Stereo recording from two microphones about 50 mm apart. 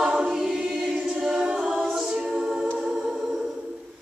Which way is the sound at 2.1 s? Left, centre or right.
Right.